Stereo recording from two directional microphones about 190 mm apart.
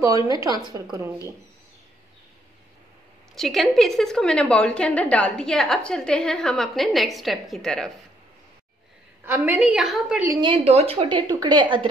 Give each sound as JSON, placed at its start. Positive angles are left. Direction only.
{"t": 0.0, "sound": "a woman's voice", "side_deg": -15}
{"t": 3.3, "sound": "a woman's voice", "side_deg": 0}
{"t": 9.2, "sound": "a woman's voice", "side_deg": -10}
{"t": 10.2, "sound": "a woman's voice", "side_deg": -15}
{"t": 10.5, "sound": "a woman's voice", "side_deg": -35}